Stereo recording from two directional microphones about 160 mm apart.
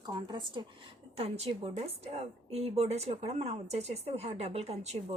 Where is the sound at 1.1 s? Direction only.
40° right (ahead or behind).